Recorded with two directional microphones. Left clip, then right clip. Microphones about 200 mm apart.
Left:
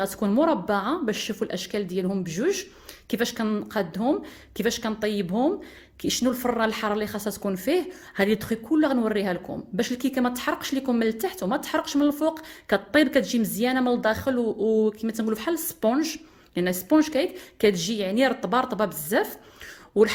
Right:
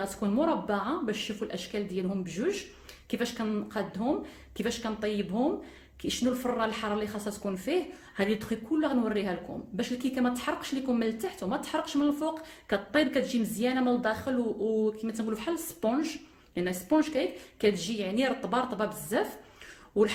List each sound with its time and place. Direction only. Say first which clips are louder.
0.0 s a woman's voice: left 6 dB; 45° left (ahead or behind)